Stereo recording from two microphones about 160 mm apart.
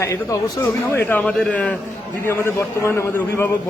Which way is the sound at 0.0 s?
20° left (ahead or behind).